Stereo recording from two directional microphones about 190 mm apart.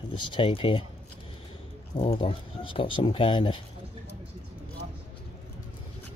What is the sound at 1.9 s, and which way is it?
Speech, 30° left (ahead or behind).